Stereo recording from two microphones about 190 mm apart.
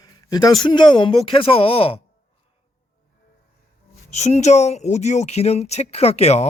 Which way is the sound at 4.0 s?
35° left (ahead or behind).